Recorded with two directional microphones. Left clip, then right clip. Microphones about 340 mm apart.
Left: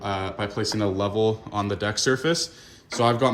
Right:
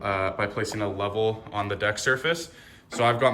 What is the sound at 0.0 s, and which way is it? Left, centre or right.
Speech, centre.